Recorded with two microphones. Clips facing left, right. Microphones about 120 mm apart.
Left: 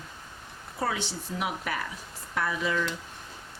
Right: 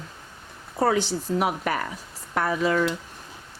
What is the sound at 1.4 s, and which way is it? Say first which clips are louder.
A woman's voice: right 3 dB; 50° right (ahead or behind).